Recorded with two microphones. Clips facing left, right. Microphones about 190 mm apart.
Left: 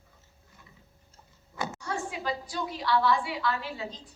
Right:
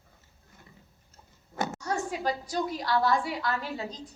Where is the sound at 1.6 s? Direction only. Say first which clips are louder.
Right 3 dB; 45° right (ahead or behind).